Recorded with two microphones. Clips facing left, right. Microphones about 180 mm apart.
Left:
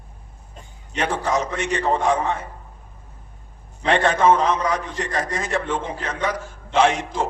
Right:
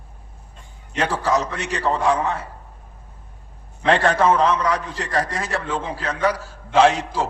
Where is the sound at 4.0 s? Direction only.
35° right (ahead or behind).